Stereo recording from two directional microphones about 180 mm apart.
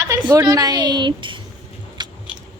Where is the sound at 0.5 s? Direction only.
20° right (ahead or behind).